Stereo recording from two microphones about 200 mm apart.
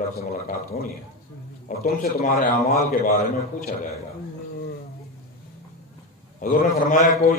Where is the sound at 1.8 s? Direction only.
45° left (ahead or behind).